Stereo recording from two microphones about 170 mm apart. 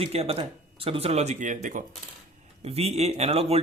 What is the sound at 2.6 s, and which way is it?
Speech, 35° right (ahead or behind).